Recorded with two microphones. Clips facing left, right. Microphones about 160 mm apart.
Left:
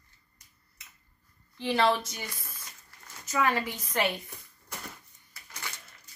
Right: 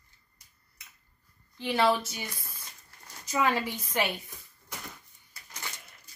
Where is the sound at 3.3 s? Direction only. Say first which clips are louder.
Even; 15° right (ahead or behind).